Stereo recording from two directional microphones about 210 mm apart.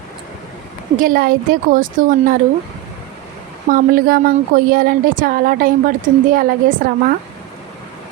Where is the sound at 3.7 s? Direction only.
45° right (ahead or behind).